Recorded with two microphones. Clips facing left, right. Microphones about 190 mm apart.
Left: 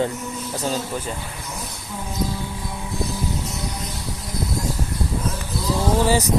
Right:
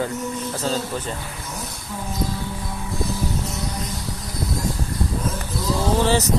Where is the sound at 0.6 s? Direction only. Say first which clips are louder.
Even; 10° left (ahead or behind).